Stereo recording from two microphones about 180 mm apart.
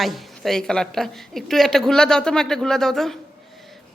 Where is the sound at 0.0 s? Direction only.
Centre (ahead or behind).